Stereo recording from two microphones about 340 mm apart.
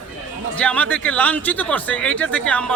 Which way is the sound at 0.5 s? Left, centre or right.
Centre.